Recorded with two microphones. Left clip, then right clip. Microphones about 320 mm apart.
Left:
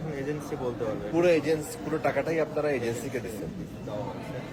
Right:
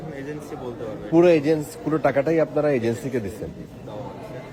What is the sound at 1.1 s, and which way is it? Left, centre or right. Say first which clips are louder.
A man's voice: right 7 dB; right.